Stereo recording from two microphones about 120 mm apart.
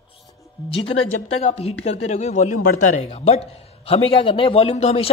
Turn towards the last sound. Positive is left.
turn(degrees=65)  # may be behind; listen again after turning